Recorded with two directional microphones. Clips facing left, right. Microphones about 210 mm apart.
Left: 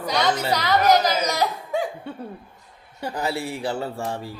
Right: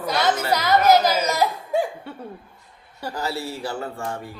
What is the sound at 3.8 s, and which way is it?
Speech, 30° left (ahead or behind).